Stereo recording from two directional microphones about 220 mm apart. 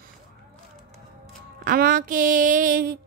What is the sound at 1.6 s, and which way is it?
A woman's voice, 40° right (ahead or behind).